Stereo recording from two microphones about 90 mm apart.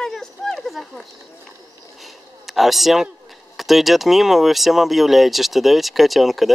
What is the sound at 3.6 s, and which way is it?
Speech, centre (ahead or behind).